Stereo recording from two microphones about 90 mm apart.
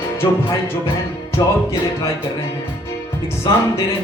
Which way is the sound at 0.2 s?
50° left (ahead or behind).